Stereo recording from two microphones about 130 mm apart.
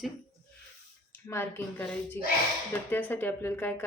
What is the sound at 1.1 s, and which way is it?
Speech, 20° left (ahead or behind).